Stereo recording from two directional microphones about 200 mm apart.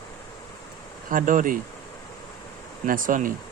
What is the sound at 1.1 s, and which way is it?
Speech, 40° right (ahead or behind).